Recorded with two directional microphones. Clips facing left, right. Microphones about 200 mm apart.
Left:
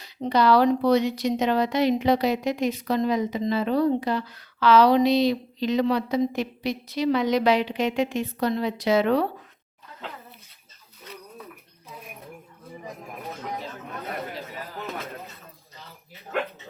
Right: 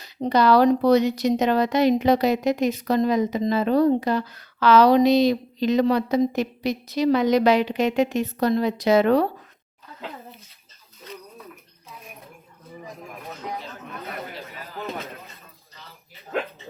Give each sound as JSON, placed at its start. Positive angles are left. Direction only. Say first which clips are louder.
{"t": 0.0, "sound": "a woman's voice", "louder": "right 2 dB", "side_deg": -40}